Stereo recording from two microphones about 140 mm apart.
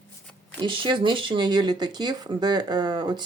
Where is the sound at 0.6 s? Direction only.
35° right (ahead or behind).